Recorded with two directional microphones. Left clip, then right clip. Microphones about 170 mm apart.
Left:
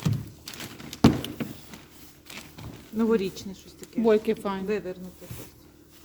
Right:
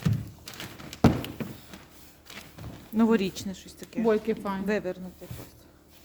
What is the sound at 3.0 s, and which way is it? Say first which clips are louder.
Speech: even; 90° right.